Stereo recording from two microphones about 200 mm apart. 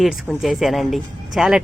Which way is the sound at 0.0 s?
Centre (ahead or behind).